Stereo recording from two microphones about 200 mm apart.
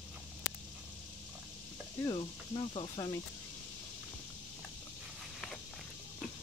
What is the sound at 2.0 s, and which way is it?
Speech, 25° left (ahead or behind).